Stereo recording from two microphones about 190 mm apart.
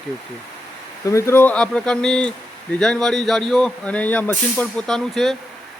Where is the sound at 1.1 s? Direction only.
15° left (ahead or behind).